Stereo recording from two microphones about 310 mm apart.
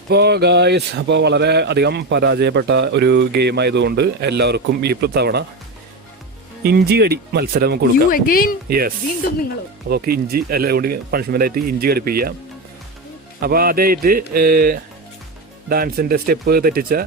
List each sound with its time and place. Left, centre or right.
0.1 s speech: right
6.6 s speech: right
8.3 s speech: left
9.9 s speech: right
13.4 s speech: right